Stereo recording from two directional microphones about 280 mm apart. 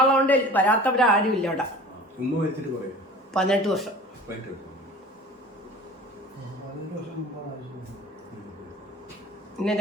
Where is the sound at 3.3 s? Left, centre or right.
Centre.